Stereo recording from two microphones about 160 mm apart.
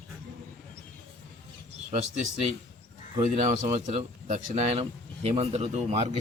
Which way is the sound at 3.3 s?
45° right (ahead or behind).